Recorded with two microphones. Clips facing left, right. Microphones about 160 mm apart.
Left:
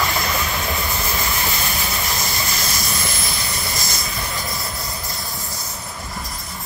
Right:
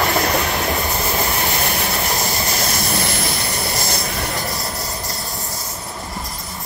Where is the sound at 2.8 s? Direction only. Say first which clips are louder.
Right 5 dB; 60° right (ahead or behind).